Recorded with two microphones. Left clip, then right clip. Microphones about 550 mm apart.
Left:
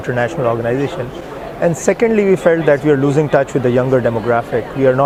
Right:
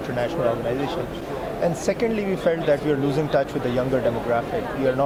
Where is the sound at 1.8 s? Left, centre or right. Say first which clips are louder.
Left 10 dB; left.